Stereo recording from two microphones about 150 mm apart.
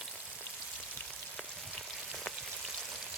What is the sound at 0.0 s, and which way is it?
Frying, 10° right (ahead or behind).